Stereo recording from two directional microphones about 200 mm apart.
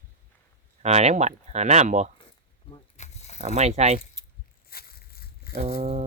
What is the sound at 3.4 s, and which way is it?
Speech, 35° right (ahead or behind).